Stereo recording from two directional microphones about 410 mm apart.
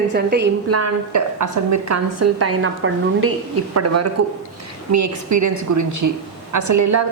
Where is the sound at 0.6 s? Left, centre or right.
Right.